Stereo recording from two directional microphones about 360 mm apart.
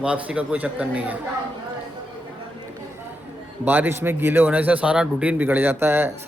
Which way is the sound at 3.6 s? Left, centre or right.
Centre.